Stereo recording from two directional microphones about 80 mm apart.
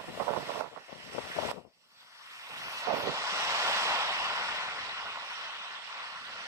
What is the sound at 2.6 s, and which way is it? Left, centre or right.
Vehicle, right.